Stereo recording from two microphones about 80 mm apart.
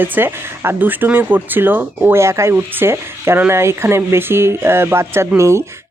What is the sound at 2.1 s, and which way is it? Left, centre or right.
Speech, right.